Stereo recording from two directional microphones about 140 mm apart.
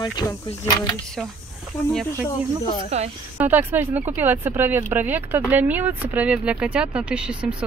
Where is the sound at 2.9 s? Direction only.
50° right (ahead or behind).